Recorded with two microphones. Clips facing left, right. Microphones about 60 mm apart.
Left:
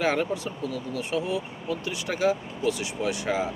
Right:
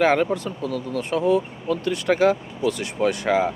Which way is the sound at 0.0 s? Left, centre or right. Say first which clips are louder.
Right 6 dB; right.